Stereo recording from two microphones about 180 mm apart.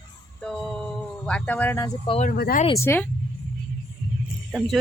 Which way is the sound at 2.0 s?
30° left (ahead or behind).